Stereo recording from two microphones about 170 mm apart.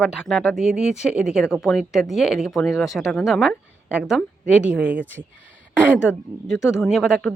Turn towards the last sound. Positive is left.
turn(degrees=0)  # may be behind; listen again after turning